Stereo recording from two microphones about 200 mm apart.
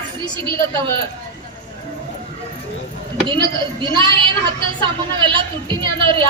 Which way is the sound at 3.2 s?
25° right (ahead or behind).